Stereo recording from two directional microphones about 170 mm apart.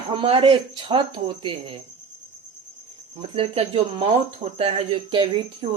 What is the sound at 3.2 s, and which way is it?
Speech, 35° right (ahead or behind).